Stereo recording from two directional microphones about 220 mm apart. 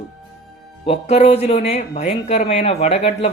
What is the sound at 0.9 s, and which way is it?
Speech, 30° left (ahead or behind).